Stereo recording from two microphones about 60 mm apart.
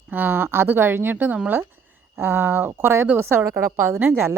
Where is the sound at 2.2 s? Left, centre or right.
Right.